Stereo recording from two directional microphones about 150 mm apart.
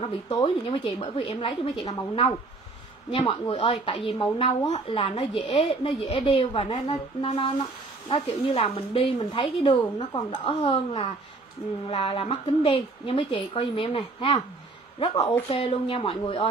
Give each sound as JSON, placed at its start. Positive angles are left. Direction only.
{"t": 0.0, "sound": "a woman's voice", "side_deg": 35}
{"t": 10.5, "sound": "a woman's voice", "side_deg": 40}
{"t": 15.0, "sound": "a woman's voice", "side_deg": 25}
{"t": 15.4, "sound": "a woman's voice", "side_deg": 35}